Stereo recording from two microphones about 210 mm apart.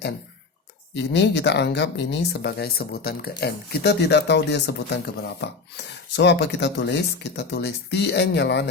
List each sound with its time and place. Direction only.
0.9 s speech: 55° left (ahead or behind)